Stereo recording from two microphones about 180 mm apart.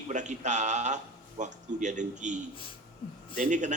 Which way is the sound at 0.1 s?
40° right (ahead or behind).